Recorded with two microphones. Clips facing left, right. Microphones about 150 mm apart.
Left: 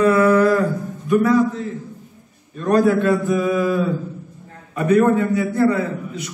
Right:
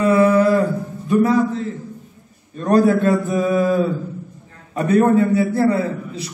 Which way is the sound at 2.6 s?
35° right (ahead or behind).